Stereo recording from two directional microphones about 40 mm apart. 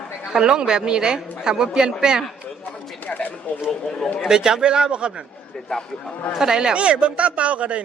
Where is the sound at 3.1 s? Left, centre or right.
Left.